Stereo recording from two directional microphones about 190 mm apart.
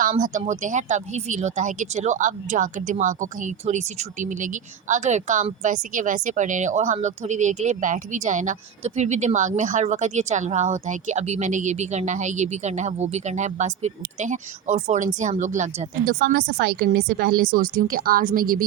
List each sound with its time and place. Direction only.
0.0 s speech: 45° right (ahead or behind)